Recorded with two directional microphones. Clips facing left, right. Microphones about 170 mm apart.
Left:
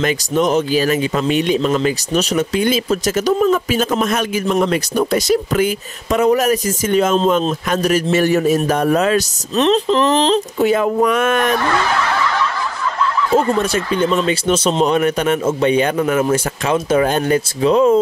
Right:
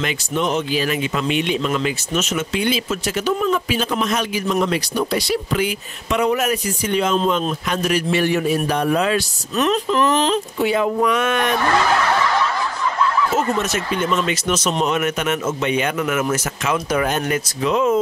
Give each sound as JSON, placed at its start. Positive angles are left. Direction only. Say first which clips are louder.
{"t": 0.0, "sound": "speech", "louder": "left 5 dB", "side_deg": 40}
{"t": 9.6, "sound": "speech", "louder": "left 4 dB", "side_deg": 30}
{"t": 10.7, "sound": "speech", "louder": "left 2 dB", "side_deg": 45}
{"t": 13.3, "sound": "speech", "louder": "left 5 dB", "side_deg": 30}